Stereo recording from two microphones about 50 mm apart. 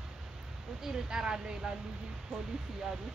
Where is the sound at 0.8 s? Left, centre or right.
Centre.